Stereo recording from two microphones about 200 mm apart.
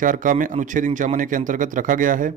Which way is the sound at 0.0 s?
40° right (ahead or behind).